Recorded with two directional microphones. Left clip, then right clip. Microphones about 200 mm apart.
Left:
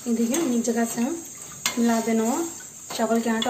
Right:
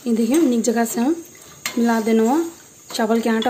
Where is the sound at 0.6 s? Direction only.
55° right (ahead or behind).